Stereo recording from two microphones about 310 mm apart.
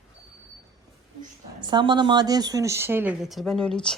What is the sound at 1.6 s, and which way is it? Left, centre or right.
Speech, centre.